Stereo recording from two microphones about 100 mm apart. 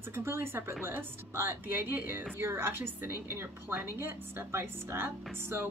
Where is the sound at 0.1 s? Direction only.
25° right (ahead or behind).